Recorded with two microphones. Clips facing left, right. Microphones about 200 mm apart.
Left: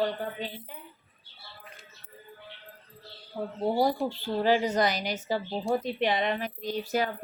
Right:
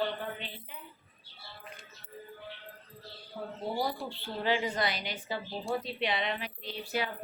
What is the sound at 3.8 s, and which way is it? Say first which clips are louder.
A woman's voice: left 8 dB; 45° left (ahead or behind).